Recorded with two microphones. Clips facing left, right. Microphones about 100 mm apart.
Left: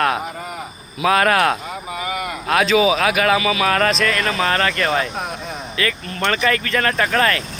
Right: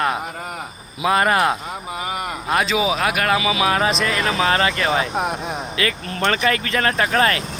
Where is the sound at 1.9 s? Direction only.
35° right (ahead or behind).